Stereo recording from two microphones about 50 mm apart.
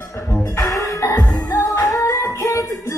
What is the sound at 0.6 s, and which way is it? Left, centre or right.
Music, left.